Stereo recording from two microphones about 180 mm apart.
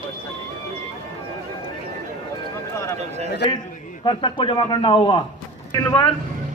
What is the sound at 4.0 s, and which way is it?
A man's voice, 25° left (ahead or behind).